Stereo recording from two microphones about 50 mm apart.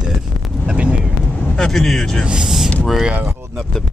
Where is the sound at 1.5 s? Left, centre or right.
Centre.